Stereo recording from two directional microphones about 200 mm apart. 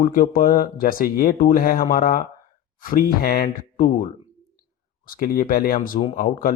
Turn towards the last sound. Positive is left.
turn(degrees=45)  # may be behind; listen again after turning